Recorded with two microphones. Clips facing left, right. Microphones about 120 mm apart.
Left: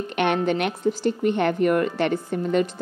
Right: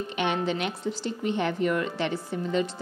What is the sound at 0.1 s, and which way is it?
A woman's voice, 60° left (ahead or behind).